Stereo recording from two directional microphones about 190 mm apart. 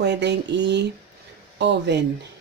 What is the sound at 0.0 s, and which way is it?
Speech, 65° right (ahead or behind).